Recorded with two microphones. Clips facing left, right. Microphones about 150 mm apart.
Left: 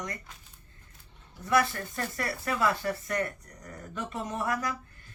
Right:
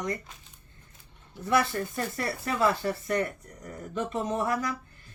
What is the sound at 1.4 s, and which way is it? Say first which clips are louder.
Speech: right 1 dB; 25° right (ahead or behind).